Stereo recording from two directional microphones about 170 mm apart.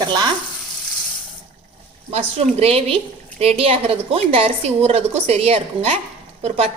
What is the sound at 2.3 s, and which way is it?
A woman's voice, 35° right (ahead or behind).